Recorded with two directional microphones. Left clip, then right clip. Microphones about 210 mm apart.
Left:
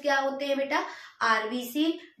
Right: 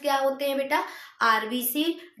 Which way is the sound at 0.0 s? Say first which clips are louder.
Right 2 dB; 55° right (ahead or behind).